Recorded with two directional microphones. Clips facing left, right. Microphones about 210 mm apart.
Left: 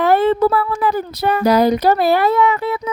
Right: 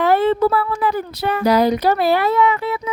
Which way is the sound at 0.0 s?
45° left (ahead or behind).